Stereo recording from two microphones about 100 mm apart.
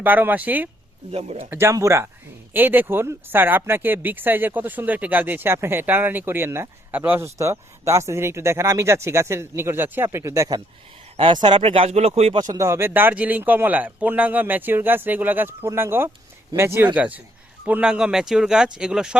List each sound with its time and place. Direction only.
0.0 s speech: 20° right (ahead or behind)
1.1 s speech: 80° right
1.5 s speech: 25° right (ahead or behind)
2.5 s speech: 20° right (ahead or behind)
11.2 s speech: 55° right (ahead or behind)
11.6 s speech: 75° right (ahead or behind); by 12.4 s 90° right
12.5 s speech: 30° right (ahead or behind); by 19.2 s 10° right (ahead or behind)